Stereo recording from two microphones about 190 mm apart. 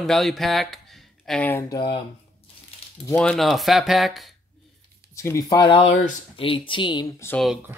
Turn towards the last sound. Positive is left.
turn(degrees=15)  # may be behind; listen again after turning